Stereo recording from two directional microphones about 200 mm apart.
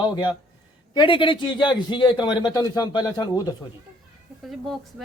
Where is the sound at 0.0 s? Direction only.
20° left (ahead or behind).